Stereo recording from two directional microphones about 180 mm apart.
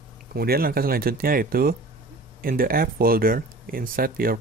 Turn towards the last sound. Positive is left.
turn(degrees=-50)  # may be behind; listen again after turning